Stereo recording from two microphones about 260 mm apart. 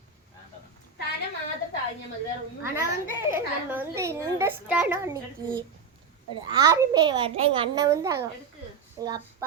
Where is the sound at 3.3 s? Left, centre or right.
Centre.